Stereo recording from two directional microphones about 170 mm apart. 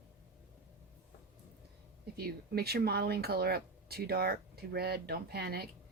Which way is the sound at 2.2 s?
65° right (ahead or behind).